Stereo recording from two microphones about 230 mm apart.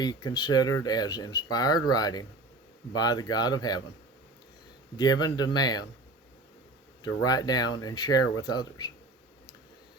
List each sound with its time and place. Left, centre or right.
0.0 s speech: centre
4.9 s speech: centre
7.3 s speech: centre